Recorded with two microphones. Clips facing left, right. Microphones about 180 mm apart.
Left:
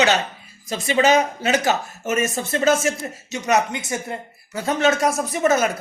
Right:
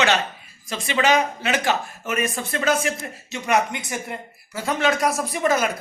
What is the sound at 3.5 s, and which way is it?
Speech, 25° left (ahead or behind).